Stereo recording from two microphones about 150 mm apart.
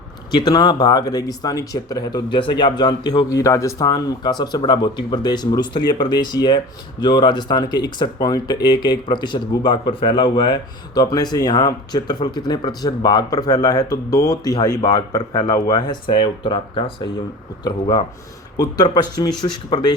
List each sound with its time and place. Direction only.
0.3 s speech: 25° left (ahead or behind)